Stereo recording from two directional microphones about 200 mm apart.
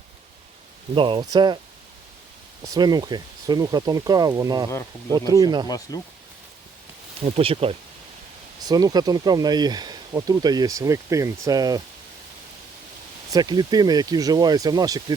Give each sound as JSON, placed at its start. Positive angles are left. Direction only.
{"t": 0.9, "sound": "speech", "side_deg": -25}
{"t": 2.7, "sound": "speech", "side_deg": -20}
{"t": 5.6, "sound": "speech", "side_deg": 20}
{"t": 7.3, "sound": "speech", "side_deg": -30}
{"t": 13.3, "sound": "speech", "side_deg": -20}